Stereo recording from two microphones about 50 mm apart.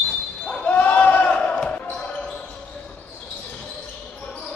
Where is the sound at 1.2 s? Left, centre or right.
Left.